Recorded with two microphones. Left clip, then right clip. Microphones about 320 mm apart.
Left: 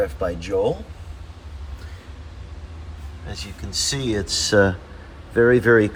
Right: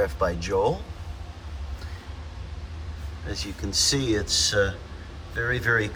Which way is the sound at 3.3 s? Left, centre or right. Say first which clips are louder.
Right 2 dB; centre.